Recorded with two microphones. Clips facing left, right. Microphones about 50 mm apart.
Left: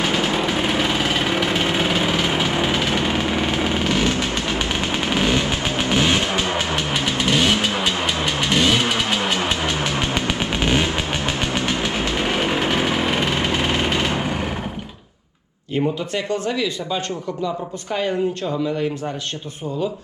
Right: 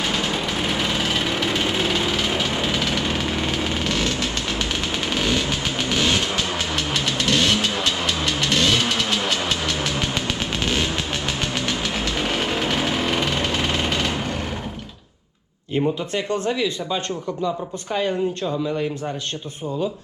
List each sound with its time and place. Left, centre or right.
0.0 s engine: centre
16.3 s speech: right